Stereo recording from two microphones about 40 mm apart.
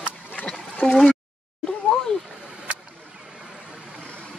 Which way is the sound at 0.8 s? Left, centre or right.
Centre.